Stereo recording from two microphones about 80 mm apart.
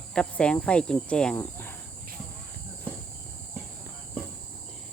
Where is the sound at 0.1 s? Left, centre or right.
Centre.